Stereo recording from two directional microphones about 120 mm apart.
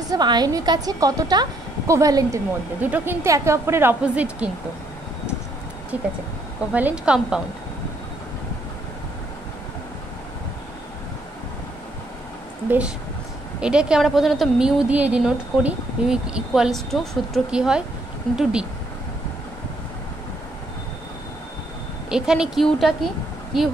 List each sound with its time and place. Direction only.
0.0 s a woman's voice: 35° right (ahead or behind)
2.8 s a woman's voice: 15° right (ahead or behind)
3.3 s a woman's voice: 25° right (ahead or behind)
4.0 s a woman's voice: 10° right (ahead or behind)
6.7 s a woman's voice: 15° right (ahead or behind)
12.6 s a woman's voice: 10° right (ahead or behind)
22.1 s a woman's voice: 5° right (ahead or behind)